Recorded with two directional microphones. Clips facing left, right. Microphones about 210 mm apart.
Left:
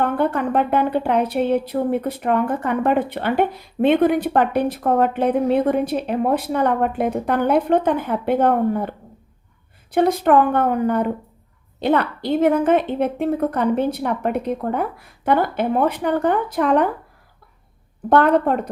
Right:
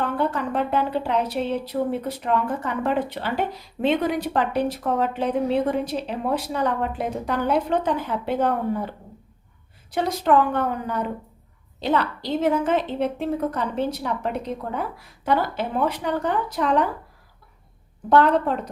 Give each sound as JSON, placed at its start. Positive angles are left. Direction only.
{"t": 0.0, "sound": "a woman's voice", "side_deg": 55}
{"t": 9.9, "sound": "a woman's voice", "side_deg": 55}
{"t": 18.1, "sound": "a woman's voice", "side_deg": 55}